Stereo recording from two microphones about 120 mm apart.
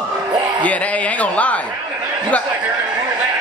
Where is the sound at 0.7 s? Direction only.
10° left (ahead or behind).